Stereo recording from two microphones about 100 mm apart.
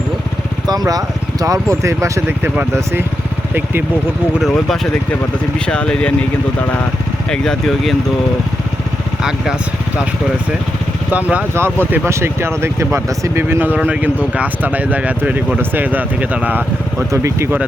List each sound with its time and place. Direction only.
0.7 s speech: 40° right (ahead or behind); by 3.0 s 25° right (ahead or behind)
4.4 s speech: centre (ahead or behind); by 6.8 s 15° left (ahead or behind)
7.3 s speech: 5° left (ahead or behind)
11.1 s speech: 15° right (ahead or behind)
17.1 s speech: 30° right (ahead or behind)